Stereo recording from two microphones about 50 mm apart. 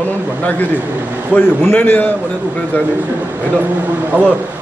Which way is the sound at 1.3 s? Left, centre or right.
Left.